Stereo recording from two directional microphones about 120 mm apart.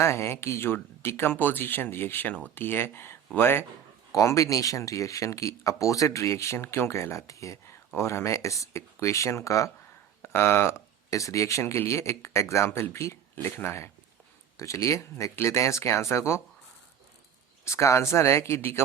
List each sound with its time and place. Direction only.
0.0 s speech: 20° left (ahead or behind)
17.7 s speech: 25° left (ahead or behind)